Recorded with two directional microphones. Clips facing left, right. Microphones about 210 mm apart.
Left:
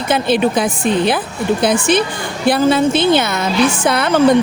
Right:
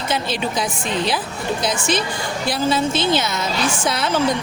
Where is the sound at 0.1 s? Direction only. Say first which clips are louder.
Left 10 dB; 55° left (ahead or behind).